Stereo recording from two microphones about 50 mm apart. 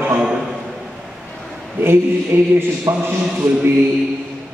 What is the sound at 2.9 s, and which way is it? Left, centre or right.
Speech, right.